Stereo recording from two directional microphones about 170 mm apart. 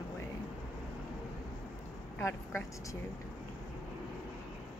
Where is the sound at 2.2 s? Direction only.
15° left (ahead or behind).